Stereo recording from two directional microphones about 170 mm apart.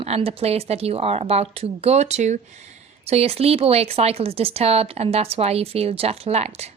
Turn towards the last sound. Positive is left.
turn(degrees=-40)  # may be behind; listen again after turning